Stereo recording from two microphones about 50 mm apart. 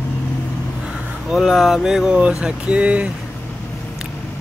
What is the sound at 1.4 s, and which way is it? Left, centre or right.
Speech, centre.